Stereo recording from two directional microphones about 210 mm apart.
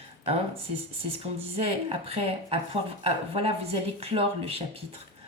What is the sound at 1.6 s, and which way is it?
Speech, 25° right (ahead or behind).